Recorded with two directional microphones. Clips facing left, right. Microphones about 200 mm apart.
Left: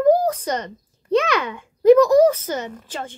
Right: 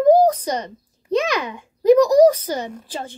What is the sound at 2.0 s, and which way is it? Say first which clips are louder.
A child's voice: right 2 dB; 35° right (ahead or behind).